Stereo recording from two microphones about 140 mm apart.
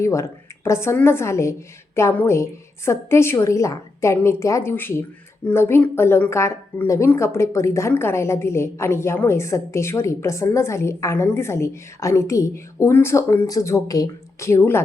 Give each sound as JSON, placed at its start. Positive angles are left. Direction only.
{"t": 0.0, "sound": "a woman's voice", "side_deg": 20}